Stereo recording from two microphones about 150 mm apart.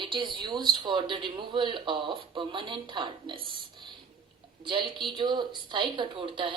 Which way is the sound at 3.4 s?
30° right (ahead or behind).